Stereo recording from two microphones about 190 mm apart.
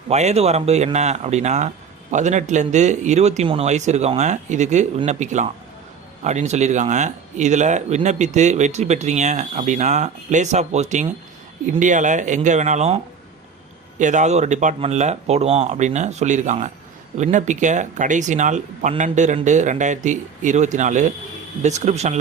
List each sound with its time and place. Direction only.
0.1 s speech: 35° right (ahead or behind)
14.0 s speech: 40° right (ahead or behind)